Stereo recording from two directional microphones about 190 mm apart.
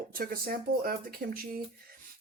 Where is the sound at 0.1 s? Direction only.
50° right (ahead or behind).